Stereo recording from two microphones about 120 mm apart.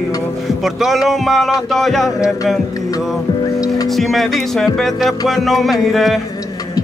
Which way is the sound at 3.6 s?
30° left (ahead or behind).